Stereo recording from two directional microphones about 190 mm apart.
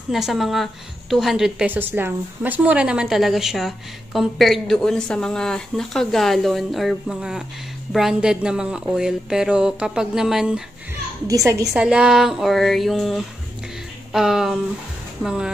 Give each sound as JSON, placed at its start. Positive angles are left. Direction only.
{"t": 0.1, "sound": "a woman's voice", "side_deg": 0}
{"t": 11.2, "sound": "a woman's voice", "side_deg": -15}
{"t": 11.7, "sound": "a woman's voice", "side_deg": -5}